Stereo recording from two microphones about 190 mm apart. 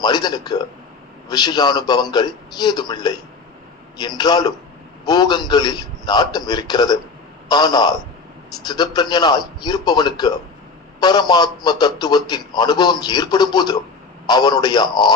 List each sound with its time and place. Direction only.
0.0 s a man's voice: 20° left (ahead or behind)
4.2 s a man's voice: 20° left (ahead or behind)